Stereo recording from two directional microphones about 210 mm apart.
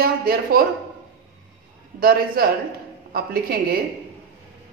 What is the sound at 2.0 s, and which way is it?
Speech, 45° right (ahead or behind).